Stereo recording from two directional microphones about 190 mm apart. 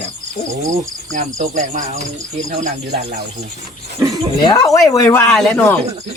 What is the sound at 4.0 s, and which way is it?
Speech, 20° right (ahead or behind).